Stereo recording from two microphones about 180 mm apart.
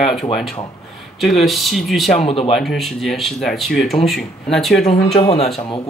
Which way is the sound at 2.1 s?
35° left (ahead or behind).